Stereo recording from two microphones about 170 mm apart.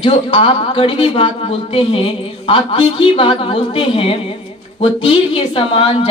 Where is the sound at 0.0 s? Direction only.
30° left (ahead or behind).